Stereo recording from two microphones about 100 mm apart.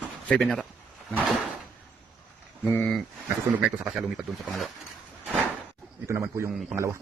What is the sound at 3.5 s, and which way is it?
Speech, 15° right (ahead or behind).